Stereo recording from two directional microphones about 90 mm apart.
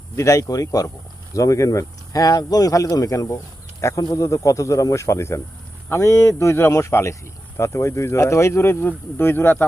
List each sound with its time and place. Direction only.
0.2 s speech: 35° left (ahead or behind)